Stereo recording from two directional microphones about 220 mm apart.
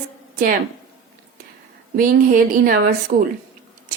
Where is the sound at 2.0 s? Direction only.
40° right (ahead or behind).